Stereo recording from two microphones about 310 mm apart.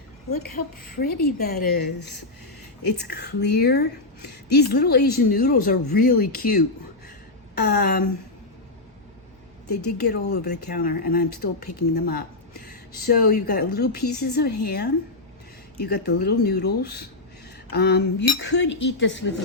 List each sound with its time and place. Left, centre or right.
0.5 s a woman's voice: left
10.0 s speech: left
13.2 s a woman's voice: left